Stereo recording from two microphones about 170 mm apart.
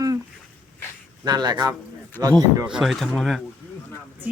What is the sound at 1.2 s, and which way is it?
Speech, 25° right (ahead or behind).